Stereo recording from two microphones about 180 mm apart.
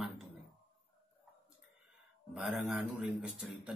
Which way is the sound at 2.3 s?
Centre (ahead or behind).